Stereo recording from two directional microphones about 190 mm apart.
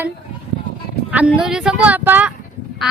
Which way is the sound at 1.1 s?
5° right (ahead or behind).